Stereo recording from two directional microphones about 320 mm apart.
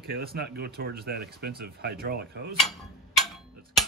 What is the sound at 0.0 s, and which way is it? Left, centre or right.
Speech, right.